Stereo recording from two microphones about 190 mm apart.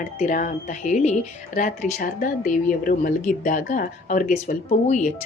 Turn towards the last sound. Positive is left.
turn(degrees=40)  # may be behind; listen again after turning